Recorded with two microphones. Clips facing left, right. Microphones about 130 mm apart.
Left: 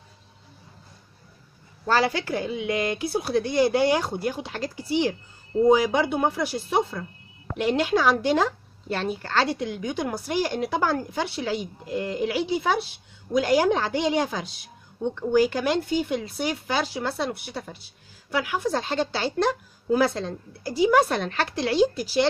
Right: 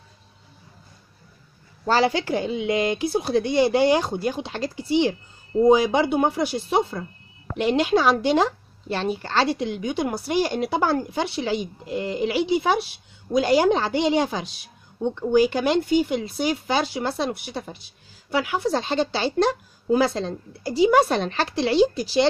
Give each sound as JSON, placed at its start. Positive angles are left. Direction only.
{"t": 1.9, "sound": "speech", "side_deg": -25}